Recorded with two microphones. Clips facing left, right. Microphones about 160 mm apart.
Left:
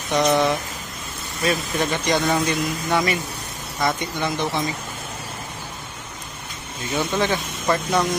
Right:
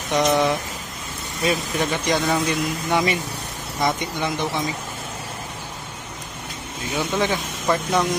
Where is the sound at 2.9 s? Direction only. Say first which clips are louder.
Right 1 dB; 20° right (ahead or behind).